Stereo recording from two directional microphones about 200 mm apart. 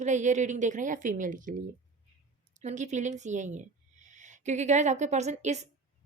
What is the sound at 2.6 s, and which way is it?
A woman's voice, 35° right (ahead or behind).